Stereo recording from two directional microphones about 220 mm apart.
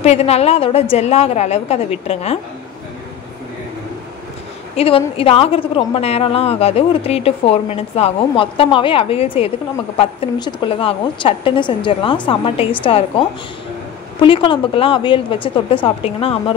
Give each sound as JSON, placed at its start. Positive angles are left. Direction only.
{"t": 0.0, "sound": "a woman's voice", "side_deg": 30}
{"t": 4.7, "sound": "a woman's voice", "side_deg": 25}
{"t": 14.2, "sound": "a woman's voice", "side_deg": 25}